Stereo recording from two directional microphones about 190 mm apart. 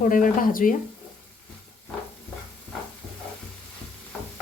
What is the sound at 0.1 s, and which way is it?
Speech, 45° left (ahead or behind).